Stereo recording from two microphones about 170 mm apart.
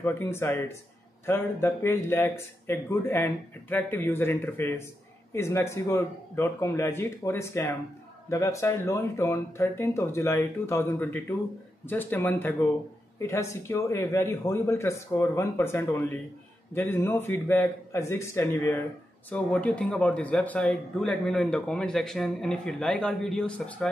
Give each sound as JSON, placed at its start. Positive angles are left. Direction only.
{"t": 0.0, "sound": "speech", "side_deg": 15}